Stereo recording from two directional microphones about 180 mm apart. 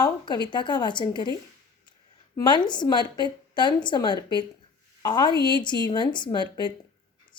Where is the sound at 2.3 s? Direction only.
25° left (ahead or behind).